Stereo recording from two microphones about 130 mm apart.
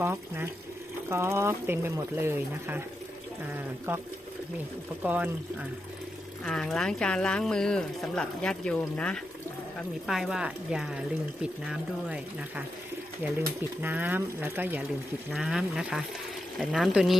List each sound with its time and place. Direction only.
0.0 s speech: 20° right (ahead or behind)
5.0 s speech: 10° right (ahead or behind)
6.4 s speech: 5° left (ahead or behind)
10.1 s speech: 5° right (ahead or behind)
13.8 s speech: 15° right (ahead or behind)
15.3 s speech: 5° right (ahead or behind)